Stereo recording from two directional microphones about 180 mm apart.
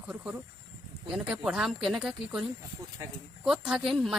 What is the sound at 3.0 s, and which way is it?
Speech, 15° right (ahead or behind).